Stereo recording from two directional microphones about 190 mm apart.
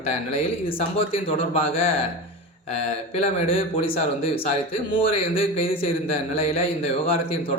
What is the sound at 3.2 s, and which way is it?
Speech, 35° left (ahead or behind).